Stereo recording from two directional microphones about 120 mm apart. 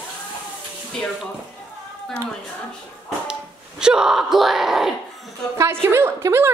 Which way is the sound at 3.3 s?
5° right (ahead or behind).